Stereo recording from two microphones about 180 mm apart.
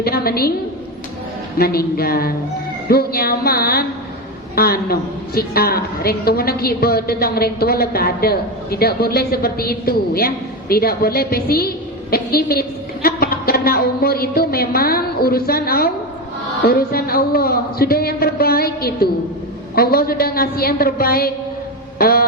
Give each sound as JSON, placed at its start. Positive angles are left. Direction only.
{"t": 0.0, "sound": "a woman's voice", "side_deg": 60}
{"t": 1.5, "sound": "a woman's voice", "side_deg": 55}